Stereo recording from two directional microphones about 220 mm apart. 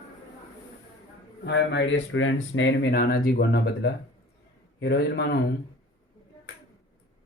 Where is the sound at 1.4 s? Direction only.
50° left (ahead or behind).